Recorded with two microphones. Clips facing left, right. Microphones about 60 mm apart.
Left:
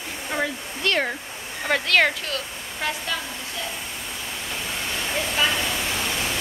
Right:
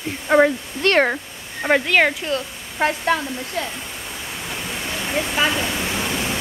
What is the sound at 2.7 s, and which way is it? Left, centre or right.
Speech, right.